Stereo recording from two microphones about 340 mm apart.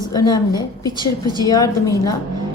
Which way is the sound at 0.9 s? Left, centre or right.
Centre.